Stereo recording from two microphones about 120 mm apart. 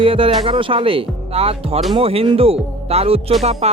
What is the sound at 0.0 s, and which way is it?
Speech, 50° right (ahead or behind).